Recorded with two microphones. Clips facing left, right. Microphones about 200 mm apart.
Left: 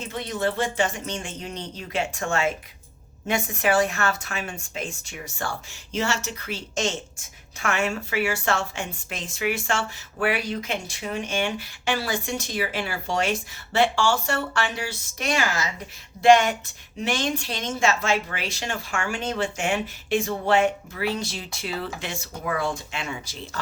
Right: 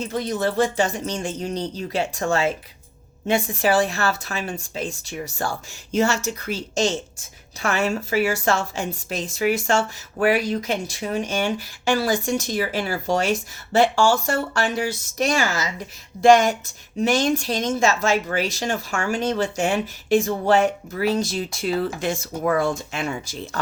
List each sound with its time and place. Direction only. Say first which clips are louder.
0.1 s a woman's voice: right 1 dB; 40° right (ahead or behind)